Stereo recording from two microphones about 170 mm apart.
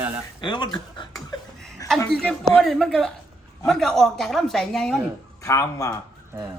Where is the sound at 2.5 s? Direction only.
Centre (ahead or behind).